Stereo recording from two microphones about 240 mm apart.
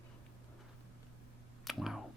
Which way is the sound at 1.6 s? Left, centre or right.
Centre.